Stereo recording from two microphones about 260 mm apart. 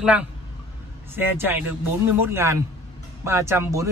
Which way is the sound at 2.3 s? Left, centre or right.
Centre.